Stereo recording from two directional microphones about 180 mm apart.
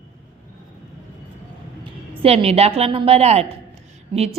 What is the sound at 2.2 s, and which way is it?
A woman's voice, 35° right (ahead or behind).